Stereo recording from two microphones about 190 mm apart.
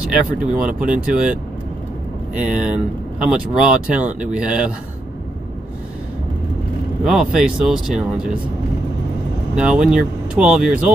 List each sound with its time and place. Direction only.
0.0 s speech: 5° right (ahead or behind)
2.4 s speech: 5° right (ahead or behind)
7.1 s speech: 5° right (ahead or behind)
9.6 s speech: 5° right (ahead or behind)